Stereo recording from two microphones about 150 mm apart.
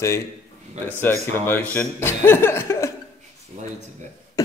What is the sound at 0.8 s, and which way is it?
Speech, 15° left (ahead or behind).